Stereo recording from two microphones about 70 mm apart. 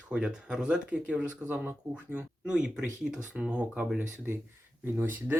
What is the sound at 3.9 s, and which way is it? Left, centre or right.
Speech, right.